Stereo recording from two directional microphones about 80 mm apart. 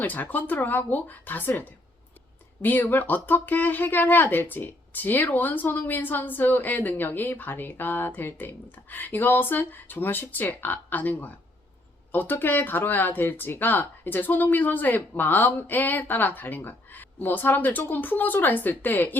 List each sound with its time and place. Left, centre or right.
0.0 s speech: left